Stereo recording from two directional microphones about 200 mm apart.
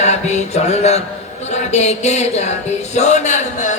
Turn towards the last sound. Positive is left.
turn(degrees=35)  # may be behind; listen again after turning